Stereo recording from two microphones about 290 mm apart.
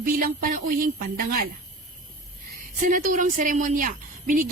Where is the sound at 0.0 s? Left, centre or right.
Right.